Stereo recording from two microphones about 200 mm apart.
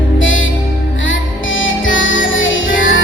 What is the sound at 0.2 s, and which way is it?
Music, 75° left (ahead or behind).